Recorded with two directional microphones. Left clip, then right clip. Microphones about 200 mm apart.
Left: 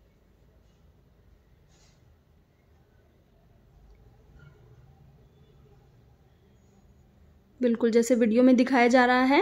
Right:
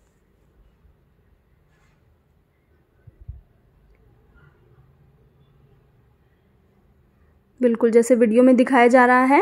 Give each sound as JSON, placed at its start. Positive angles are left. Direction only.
{"t": 7.6, "sound": "a woman's voice", "side_deg": -15}